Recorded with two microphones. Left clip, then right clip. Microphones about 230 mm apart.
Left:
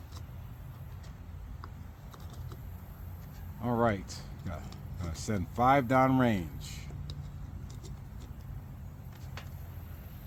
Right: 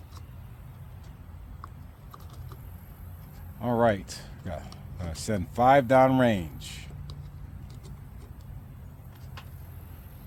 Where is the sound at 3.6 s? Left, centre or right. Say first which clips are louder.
Right 6 dB; right.